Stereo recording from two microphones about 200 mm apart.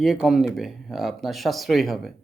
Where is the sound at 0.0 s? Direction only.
Centre (ahead or behind).